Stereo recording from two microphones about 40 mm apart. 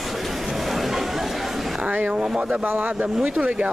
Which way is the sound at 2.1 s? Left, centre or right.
Centre.